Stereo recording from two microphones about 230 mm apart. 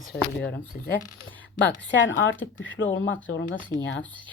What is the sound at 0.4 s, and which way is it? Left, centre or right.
Speech, left.